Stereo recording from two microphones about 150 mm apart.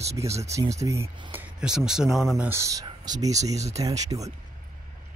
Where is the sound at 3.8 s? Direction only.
25° right (ahead or behind).